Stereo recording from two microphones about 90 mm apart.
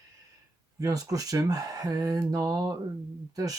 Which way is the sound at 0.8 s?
40° right (ahead or behind).